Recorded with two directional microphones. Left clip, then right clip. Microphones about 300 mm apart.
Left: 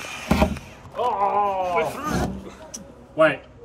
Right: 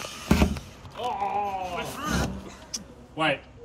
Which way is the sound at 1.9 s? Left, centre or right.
Centre.